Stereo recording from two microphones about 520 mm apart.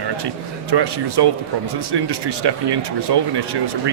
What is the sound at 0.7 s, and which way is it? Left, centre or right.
Speech, right.